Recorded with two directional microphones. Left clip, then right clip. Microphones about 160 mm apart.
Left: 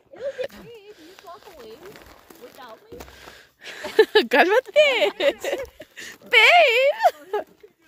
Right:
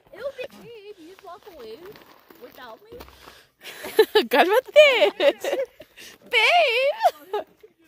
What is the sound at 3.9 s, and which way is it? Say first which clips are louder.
Speech: left 1 dB; 5° left (ahead or behind).